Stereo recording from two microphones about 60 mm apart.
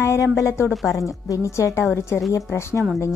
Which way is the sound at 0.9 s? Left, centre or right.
Left.